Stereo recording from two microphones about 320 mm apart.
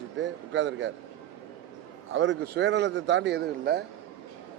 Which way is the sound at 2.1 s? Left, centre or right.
Right.